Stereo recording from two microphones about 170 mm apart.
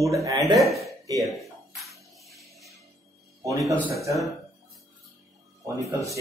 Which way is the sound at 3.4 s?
20° right (ahead or behind).